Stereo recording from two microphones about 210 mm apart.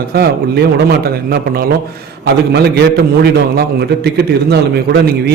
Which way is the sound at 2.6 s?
50° right (ahead or behind).